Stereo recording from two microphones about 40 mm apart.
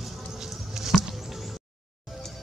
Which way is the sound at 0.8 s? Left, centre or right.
Centre.